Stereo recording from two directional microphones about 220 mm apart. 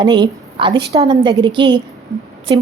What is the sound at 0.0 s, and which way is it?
A woman's voice, 20° right (ahead or behind).